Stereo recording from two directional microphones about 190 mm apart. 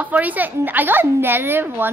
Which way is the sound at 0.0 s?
10° right (ahead or behind).